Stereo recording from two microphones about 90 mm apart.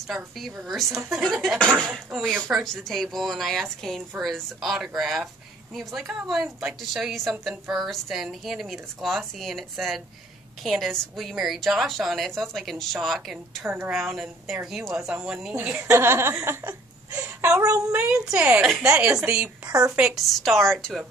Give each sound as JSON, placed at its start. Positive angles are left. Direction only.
{"t": 0.1, "sound": "a woman's voice", "side_deg": 0}
{"t": 1.6, "sound": "speech", "side_deg": 10}
{"t": 1.9, "sound": "a woman's voice", "side_deg": 0}
{"t": 15.5, "sound": "a woman's voice", "side_deg": -20}
{"t": 17.6, "sound": "speech", "side_deg": -35}
{"t": 17.9, "sound": "a woman's voice", "side_deg": -10}
{"t": 20.1, "sound": "a woman's voice", "side_deg": 0}